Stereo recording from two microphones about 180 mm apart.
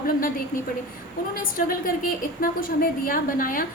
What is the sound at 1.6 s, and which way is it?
A woman's voice, 50° left (ahead or behind).